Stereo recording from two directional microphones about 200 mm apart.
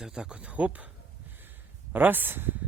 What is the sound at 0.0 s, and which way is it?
Speech, 5° right (ahead or behind).